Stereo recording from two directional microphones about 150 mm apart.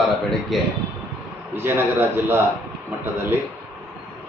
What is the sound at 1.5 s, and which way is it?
Speech, 15° right (ahead or behind).